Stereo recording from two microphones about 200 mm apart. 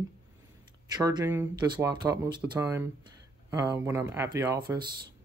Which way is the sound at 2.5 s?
10° right (ahead or behind).